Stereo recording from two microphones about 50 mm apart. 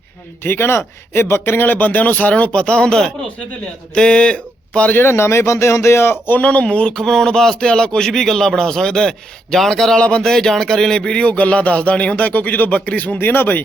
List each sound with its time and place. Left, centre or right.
0.4 s speech: left
4.9 s speech: left
6.4 s speech: left
13.1 s speech: left